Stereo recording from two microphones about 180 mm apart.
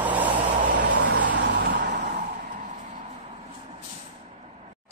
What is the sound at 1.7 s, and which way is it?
Vehicle, 65° right (ahead or behind).